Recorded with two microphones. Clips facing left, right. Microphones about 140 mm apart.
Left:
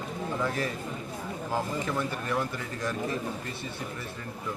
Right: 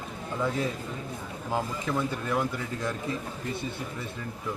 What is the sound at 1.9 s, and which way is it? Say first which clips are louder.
Speech: right 5 dB; 10° right (ahead or behind).